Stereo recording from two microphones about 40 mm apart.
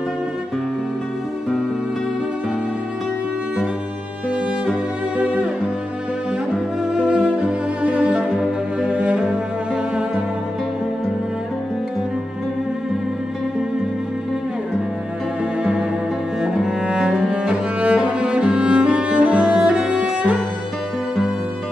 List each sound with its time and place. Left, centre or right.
5.2 s music: right
6.9 s music: centre
8.8 s cello: right
16.8 s music: right
18.0 s cello: right
19.1 s cello: right